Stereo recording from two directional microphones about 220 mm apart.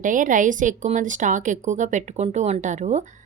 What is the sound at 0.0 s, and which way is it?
A woman's voice, 35° right (ahead or behind).